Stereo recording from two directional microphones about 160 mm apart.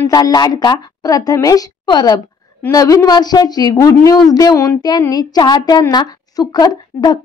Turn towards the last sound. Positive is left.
turn(degrees=25)  # may be behind; listen again after turning